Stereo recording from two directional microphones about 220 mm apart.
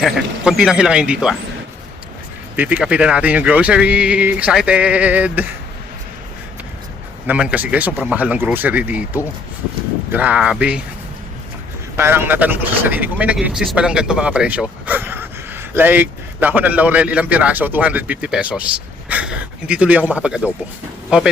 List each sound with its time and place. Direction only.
0.0 s speech: centre (ahead or behind)
2.6 s speech: 5° right (ahead or behind)
7.3 s speech: 5° right (ahead or behind)
11.9 s speech: 10° right (ahead or behind)